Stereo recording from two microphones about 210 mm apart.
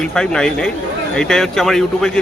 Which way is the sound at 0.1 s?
5° left (ahead or behind).